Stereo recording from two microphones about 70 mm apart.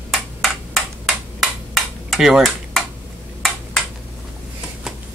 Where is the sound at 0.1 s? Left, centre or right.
Centre.